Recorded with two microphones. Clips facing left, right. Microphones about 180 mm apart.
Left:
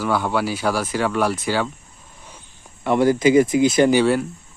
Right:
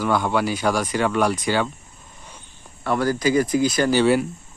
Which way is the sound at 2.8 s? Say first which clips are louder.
Left 5 dB; 20° left (ahead or behind).